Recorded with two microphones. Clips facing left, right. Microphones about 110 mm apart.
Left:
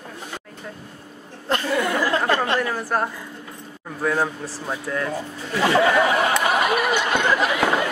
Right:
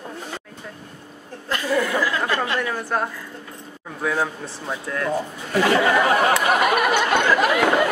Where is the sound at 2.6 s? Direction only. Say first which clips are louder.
Left 1 dB; 5° left (ahead or behind).